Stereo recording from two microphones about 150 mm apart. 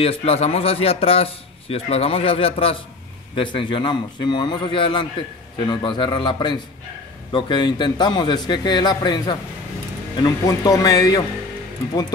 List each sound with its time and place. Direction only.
0.0 s a man's voice: 40° left (ahead or behind); by 11.2 s 25° left (ahead or behind)